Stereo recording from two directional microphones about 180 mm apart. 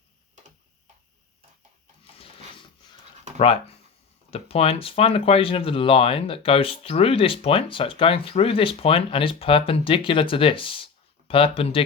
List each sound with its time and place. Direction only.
3.3 s speech: 30° left (ahead or behind)